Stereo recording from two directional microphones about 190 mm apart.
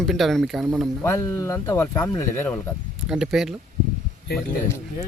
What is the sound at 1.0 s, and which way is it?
Speech, 15° left (ahead or behind).